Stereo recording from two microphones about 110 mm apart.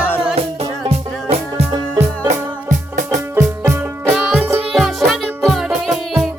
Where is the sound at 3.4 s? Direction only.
25° right (ahead or behind).